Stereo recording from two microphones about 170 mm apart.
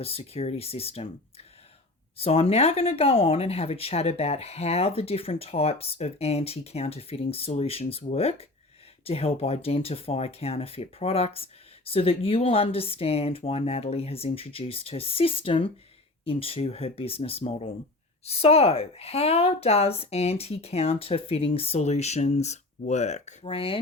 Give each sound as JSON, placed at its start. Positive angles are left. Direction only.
{"t": 0.0, "sound": "speech", "side_deg": 35}
{"t": 2.1, "sound": "speech", "side_deg": 35}